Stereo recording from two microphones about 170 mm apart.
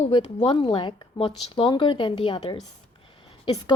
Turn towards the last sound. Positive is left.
turn(degrees=30)  # may be behind; listen again after turning